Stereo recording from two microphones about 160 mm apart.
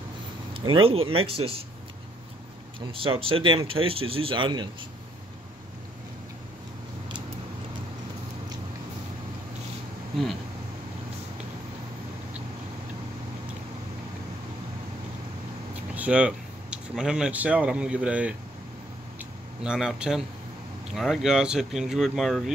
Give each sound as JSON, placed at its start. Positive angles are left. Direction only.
{"t": 0.5, "sound": "speech", "side_deg": -30}
{"t": 2.9, "sound": "speech", "side_deg": -35}
{"t": 15.9, "sound": "speech", "side_deg": -10}
{"t": 19.6, "sound": "speech", "side_deg": -5}